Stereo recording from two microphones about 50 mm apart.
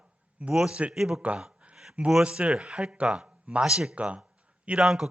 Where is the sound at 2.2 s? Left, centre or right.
Right.